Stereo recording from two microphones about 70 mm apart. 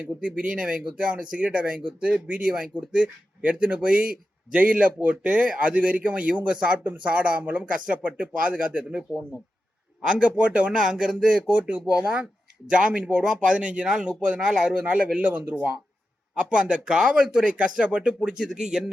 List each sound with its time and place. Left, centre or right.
0.0 s speech: centre
10.1 s speech: centre